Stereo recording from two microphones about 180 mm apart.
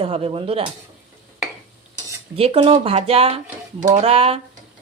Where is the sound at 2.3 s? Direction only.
35° right (ahead or behind).